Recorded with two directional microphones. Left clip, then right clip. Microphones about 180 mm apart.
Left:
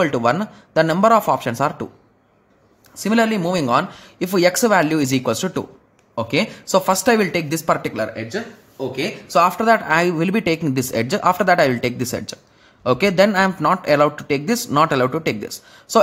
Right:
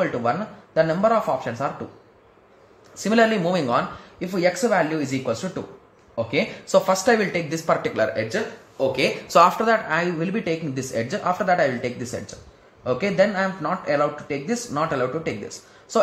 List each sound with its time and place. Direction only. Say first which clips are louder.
0.0 s speech: left 5 dB; 50° left (ahead or behind)
3.0 s speech: even; 35° left (ahead or behind)
8.0 s speech: right 2 dB; 20° left (ahead or behind)
9.3 s speech: left 2 dB; 30° left (ahead or behind)